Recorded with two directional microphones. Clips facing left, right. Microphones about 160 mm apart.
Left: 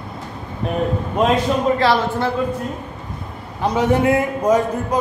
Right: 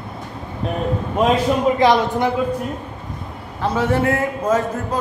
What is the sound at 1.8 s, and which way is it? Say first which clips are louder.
Speech: right 2 dB; 15° right (ahead or behind).